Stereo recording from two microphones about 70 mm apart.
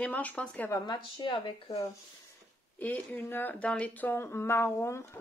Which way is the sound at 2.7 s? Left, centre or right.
Left.